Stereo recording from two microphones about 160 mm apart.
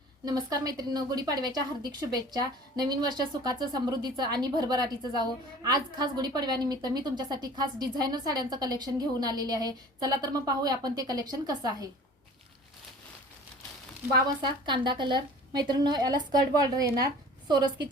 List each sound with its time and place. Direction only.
0.3 s a woman's voice: 25° right (ahead or behind)
14.3 s a woman's voice: 30° right (ahead or behind)